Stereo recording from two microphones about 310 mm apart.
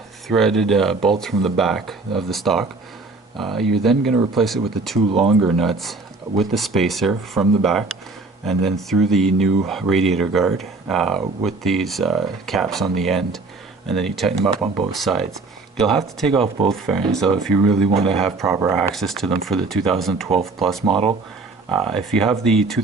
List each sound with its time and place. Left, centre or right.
0.3 s speech: centre
8.9 s speech: centre
16.3 s speech: centre
16.6 s speech: centre
17.8 s speech: centre
18.2 s speech: centre
20.9 s speech: centre
21.8 s speech: centre